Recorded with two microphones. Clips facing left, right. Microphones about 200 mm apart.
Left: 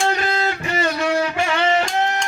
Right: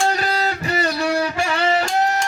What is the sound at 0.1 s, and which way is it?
Guitar, 35° right (ahead or behind).